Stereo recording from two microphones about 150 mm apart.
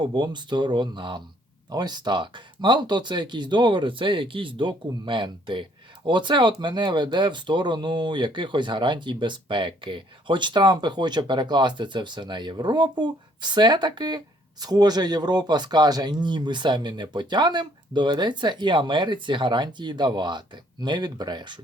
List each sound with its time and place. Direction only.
0.0 s speech: 30° right (ahead or behind)